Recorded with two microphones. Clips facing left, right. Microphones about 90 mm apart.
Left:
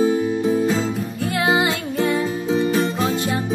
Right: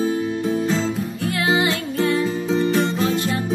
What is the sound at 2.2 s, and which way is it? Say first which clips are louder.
Music: even; 5° left (ahead or behind).